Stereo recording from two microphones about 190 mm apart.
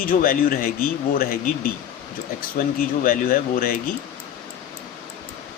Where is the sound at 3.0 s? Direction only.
50° left (ahead or behind).